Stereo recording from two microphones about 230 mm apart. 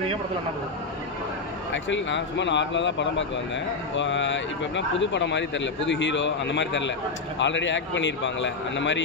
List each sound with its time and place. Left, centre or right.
1.7 s speech: left